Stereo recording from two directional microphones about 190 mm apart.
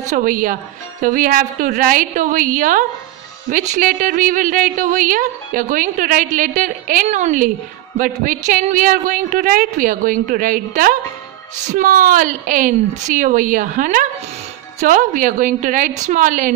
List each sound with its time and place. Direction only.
0.1 s a woman's voice: 45° right (ahead or behind)